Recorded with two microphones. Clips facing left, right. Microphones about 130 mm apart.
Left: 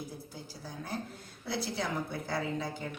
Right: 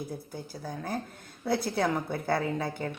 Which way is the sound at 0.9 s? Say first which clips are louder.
Right 3 dB; 50° right (ahead or behind).